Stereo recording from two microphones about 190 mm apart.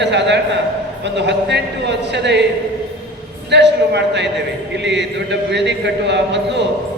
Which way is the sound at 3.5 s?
65° right (ahead or behind).